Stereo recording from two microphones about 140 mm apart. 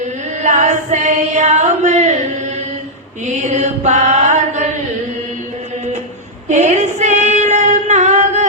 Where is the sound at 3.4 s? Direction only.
55° right (ahead or behind).